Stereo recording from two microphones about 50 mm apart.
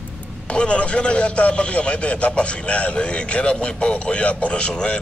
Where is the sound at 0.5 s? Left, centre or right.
Left.